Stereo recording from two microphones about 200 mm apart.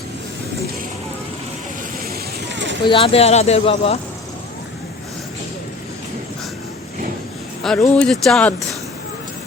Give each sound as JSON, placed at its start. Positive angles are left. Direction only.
{"t": 2.0, "sound": "vehicle", "side_deg": -65}
{"t": 2.8, "sound": "speech", "side_deg": 25}
{"t": 7.6, "sound": "speech", "side_deg": 5}